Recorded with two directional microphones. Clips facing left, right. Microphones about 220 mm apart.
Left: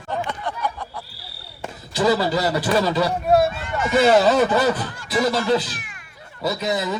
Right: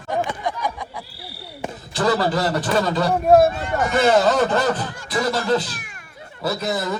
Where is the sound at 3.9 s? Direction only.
5° left (ahead or behind).